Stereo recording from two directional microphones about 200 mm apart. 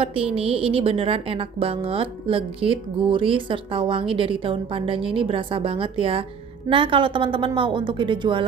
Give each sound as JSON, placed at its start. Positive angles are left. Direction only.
{"t": 0.0, "sound": "a woman's voice", "side_deg": -30}